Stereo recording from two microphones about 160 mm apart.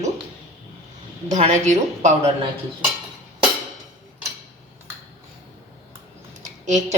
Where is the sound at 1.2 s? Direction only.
50° right (ahead or behind).